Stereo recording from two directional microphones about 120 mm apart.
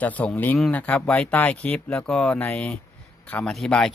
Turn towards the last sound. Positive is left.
turn(degrees=5)  # may be behind; listen again after turning